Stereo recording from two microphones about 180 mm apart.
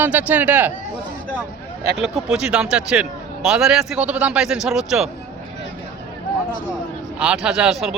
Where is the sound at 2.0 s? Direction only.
5° right (ahead or behind).